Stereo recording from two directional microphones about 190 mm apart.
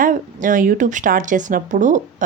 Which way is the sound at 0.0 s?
45° right (ahead or behind).